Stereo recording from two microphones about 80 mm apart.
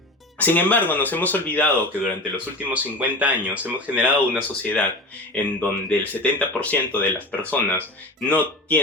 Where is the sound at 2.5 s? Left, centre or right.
Centre.